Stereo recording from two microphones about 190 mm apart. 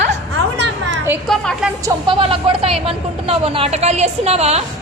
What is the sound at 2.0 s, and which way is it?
A woman's voice, 30° right (ahead or behind).